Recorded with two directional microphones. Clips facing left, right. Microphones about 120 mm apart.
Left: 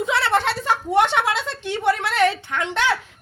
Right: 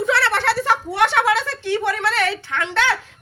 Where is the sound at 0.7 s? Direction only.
80° right.